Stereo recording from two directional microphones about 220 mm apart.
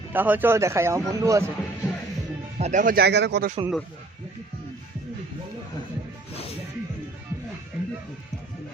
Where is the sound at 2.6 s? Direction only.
35° right (ahead or behind).